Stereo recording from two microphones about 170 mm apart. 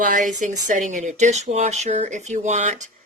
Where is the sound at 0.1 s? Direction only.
50° right (ahead or behind).